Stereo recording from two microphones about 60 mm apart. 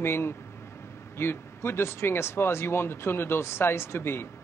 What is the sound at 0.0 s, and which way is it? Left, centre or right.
Speech, left.